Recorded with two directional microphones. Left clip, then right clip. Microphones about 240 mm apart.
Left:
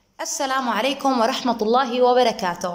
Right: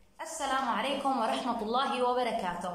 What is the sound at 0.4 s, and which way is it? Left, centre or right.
A woman's voice, left.